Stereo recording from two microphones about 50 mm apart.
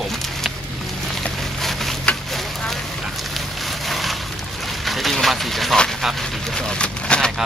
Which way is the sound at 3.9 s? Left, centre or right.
Centre.